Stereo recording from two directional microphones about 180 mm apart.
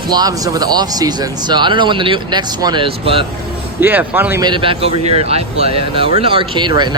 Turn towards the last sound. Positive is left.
turn(degrees=-25)  # may be behind; listen again after turning